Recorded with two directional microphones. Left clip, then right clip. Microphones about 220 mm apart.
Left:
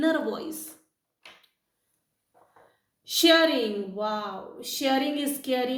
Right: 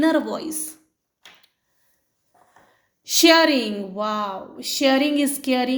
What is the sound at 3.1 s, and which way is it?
A woman's voice, 50° right (ahead or behind).